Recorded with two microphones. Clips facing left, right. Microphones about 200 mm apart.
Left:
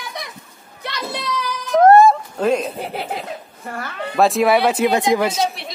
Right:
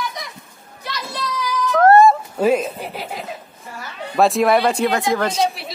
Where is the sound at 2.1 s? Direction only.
5° right (ahead or behind).